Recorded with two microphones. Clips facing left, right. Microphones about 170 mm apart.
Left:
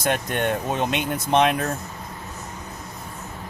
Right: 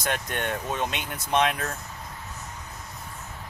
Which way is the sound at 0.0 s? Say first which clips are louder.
Left 6 dB; 20° left (ahead or behind).